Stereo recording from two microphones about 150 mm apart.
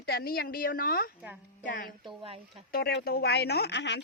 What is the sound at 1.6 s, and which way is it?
Speech, 65° left (ahead or behind).